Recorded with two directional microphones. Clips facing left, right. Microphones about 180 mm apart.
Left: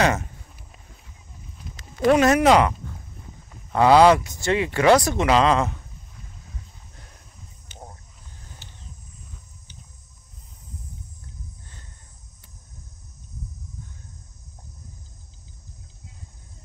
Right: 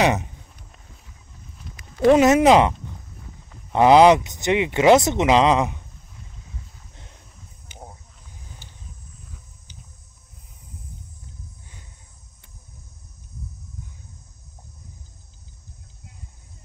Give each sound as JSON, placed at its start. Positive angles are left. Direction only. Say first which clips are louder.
{"t": 0.0, "sound": "speech", "louder": "right 2 dB", "side_deg": -20}
{"t": 2.0, "sound": "speech", "louder": "right 3 dB", "side_deg": -20}
{"t": 3.7, "sound": "speech", "louder": "right 2 dB", "side_deg": -20}
{"t": 7.6, "sound": "a sound", "louder": "right 1 dB", "side_deg": -10}